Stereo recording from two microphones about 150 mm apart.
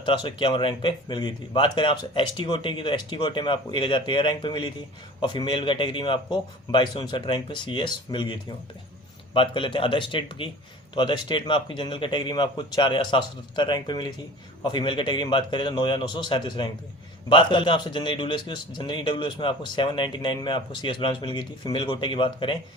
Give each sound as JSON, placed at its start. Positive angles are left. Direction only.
{"t": 0.0, "sound": "a man's voice", "side_deg": 35}